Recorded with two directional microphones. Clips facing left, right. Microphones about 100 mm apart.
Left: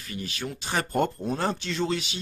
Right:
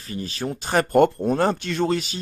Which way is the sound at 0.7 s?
60° right (ahead or behind).